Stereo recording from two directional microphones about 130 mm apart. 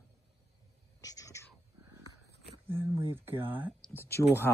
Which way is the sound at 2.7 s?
20° right (ahead or behind).